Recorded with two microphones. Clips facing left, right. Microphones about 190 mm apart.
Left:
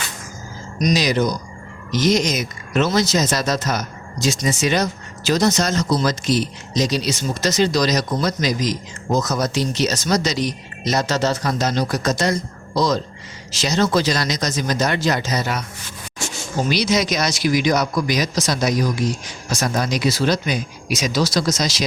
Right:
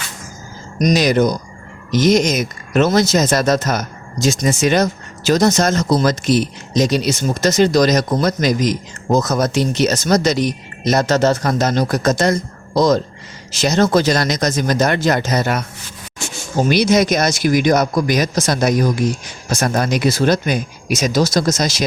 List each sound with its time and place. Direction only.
0.8 s speech: 50° right (ahead or behind)